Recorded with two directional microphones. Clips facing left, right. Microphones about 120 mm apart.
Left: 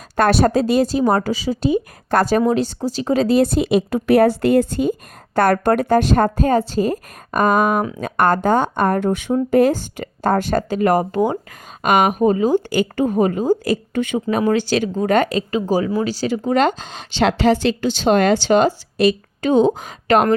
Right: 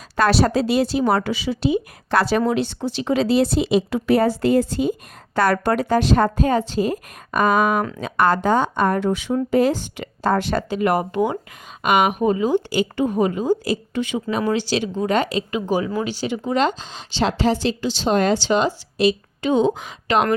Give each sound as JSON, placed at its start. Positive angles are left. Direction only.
{"t": 0.2, "sound": "speech", "side_deg": 50}
{"t": 7.8, "sound": "speech", "side_deg": 15}
{"t": 8.0, "sound": "speech", "side_deg": 50}
{"t": 16.5, "sound": "speech", "side_deg": 50}